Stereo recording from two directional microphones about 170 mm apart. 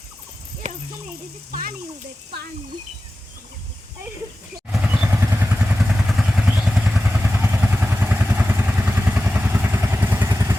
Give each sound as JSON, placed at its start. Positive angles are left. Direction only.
{"t": 0.6, "sound": "a sound", "side_deg": -45}
{"t": 1.5, "sound": "speech", "side_deg": -60}
{"t": 4.7, "sound": "vehicle", "side_deg": -5}